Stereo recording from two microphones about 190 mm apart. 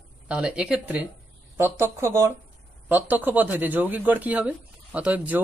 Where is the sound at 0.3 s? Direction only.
5° right (ahead or behind).